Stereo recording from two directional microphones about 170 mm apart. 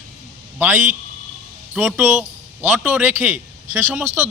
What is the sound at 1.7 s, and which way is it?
A man's voice, centre (ahead or behind).